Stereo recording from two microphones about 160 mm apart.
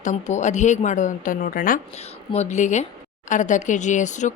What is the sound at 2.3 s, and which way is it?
A woman's voice, 45° left (ahead or behind).